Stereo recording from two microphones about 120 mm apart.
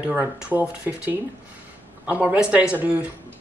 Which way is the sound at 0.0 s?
15° right (ahead or behind).